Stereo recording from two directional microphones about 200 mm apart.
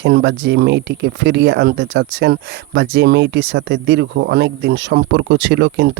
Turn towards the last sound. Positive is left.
turn(degrees=-60)  # may be behind; listen again after turning